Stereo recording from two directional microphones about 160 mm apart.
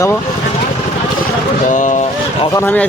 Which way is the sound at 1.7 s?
55° left (ahead or behind).